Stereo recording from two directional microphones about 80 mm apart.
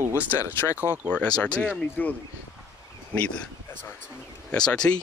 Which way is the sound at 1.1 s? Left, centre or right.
Centre.